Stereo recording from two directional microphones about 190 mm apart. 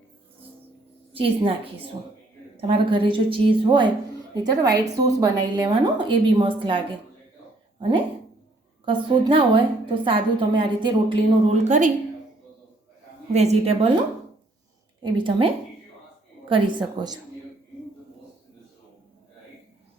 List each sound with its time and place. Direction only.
1.1 s a woman's voice: 30° right (ahead or behind)
8.8 s a woman's voice: 25° right (ahead or behind)
13.3 s a woman's voice: 35° right (ahead or behind)
15.0 s a woman's voice: 25° right (ahead or behind)
16.5 s a woman's voice: 20° right (ahead or behind)